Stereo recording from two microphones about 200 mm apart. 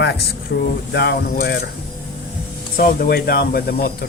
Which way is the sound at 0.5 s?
60° left (ahead or behind).